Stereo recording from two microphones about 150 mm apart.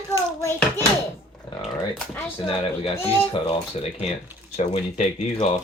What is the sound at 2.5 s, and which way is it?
Speech, 40° left (ahead or behind).